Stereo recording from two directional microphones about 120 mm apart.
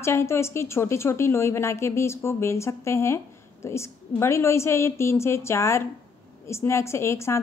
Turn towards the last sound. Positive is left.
turn(degrees=25)  # may be behind; listen again after turning